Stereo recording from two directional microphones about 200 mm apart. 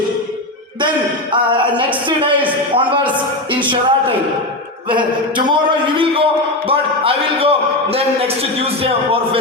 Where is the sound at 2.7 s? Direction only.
25° right (ahead or behind).